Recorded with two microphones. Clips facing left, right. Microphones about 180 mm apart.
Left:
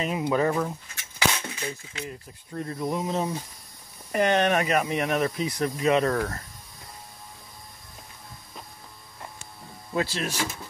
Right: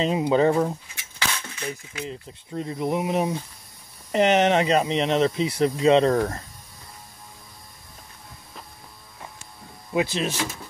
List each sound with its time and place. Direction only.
0.0 s speech: 25° right (ahead or behind)
9.9 s speech: 20° right (ahead or behind)